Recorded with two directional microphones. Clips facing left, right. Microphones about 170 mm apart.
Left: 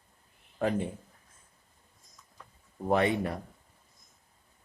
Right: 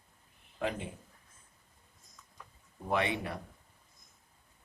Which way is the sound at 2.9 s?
40° left (ahead or behind).